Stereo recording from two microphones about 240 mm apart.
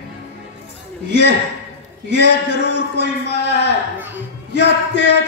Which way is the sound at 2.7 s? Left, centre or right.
Left.